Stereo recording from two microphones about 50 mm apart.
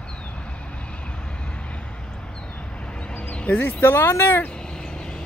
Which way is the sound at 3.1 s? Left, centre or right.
Left.